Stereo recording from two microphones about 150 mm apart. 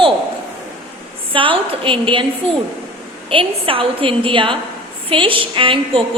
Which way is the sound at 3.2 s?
35° right (ahead or behind).